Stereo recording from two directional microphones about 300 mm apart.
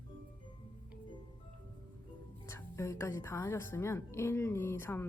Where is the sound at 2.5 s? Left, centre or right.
Centre.